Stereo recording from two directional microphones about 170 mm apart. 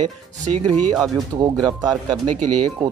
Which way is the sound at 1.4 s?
25° right (ahead or behind).